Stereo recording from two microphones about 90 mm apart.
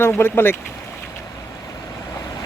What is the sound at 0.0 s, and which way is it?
Speech, 25° left (ahead or behind).